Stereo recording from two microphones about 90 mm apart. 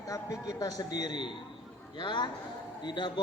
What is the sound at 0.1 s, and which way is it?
A man's voice, 40° left (ahead or behind).